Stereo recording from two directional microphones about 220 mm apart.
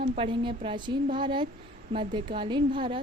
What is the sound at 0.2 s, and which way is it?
A woman's voice, 25° right (ahead or behind).